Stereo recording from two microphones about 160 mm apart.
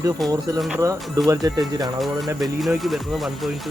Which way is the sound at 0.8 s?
20° right (ahead or behind).